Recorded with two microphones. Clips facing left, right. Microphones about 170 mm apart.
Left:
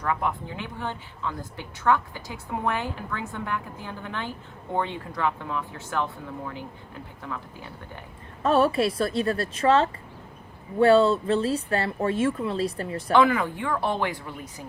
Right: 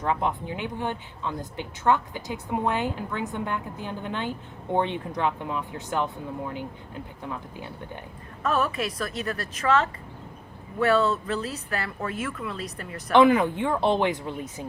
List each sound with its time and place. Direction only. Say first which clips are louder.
0.0 s a woman's voice: right 1 dB; 20° right (ahead or behind)
8.4 s a woman's voice: left 5 dB; 30° left (ahead or behind)
13.1 s a woman's voice: right 3 dB; 20° right (ahead or behind)